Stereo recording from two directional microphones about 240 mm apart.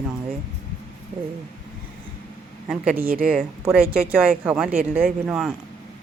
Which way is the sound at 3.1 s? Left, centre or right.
Right.